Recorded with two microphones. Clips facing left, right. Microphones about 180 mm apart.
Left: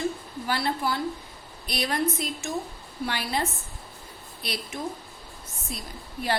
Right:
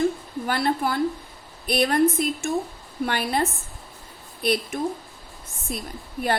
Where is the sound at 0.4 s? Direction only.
50° right (ahead or behind).